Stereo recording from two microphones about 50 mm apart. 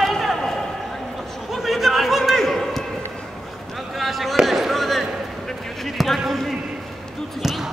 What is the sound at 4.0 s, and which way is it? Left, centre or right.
Fireworks, centre.